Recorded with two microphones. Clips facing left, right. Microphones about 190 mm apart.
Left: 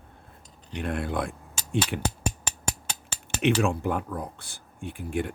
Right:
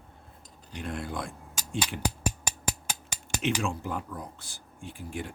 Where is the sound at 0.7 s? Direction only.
60° left (ahead or behind).